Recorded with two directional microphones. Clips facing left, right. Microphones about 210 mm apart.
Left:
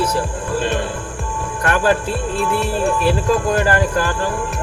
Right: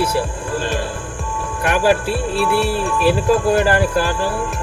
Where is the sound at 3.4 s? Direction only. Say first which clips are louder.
Right 2 dB; 15° right (ahead or behind).